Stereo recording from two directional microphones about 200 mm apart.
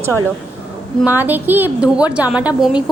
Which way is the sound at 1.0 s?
10° right (ahead or behind).